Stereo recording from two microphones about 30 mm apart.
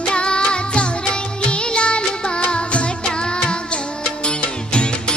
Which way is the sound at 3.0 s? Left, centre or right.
Left.